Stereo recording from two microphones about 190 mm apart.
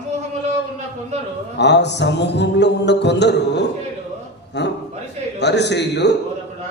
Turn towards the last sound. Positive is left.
turn(degrees=65)  # may be behind; listen again after turning